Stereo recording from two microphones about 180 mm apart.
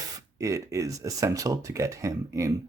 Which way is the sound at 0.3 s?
15° right (ahead or behind).